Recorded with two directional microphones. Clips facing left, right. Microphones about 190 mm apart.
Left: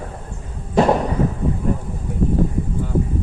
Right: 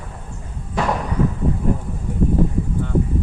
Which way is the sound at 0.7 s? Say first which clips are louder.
Left 7 dB; 30° left (ahead or behind).